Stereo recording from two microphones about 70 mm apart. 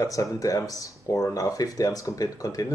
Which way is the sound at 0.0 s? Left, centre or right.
Left.